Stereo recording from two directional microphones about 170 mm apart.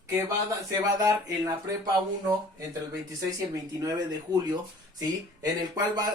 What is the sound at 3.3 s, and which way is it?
Speech, 20° right (ahead or behind).